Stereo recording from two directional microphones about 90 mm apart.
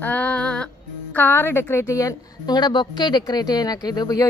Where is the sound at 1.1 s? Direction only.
25° left (ahead or behind).